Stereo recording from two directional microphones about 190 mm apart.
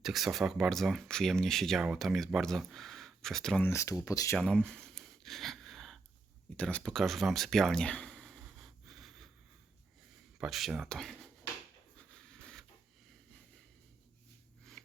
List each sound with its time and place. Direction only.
0.0 s speech: centre (ahead or behind)
3.7 s speech: 15° left (ahead or behind)
4.4 s a sound: 5° left (ahead or behind)
10.3 s speech: centre (ahead or behind)
11.9 s a sound: 5° left (ahead or behind)
14.6 s snort: centre (ahead or behind)